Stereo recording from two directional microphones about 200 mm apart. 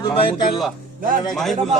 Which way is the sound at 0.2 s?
25° left (ahead or behind).